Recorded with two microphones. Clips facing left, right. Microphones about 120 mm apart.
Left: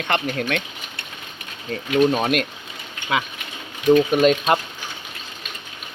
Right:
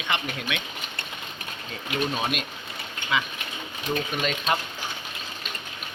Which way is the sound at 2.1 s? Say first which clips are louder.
Left 8 dB; 55° left (ahead or behind).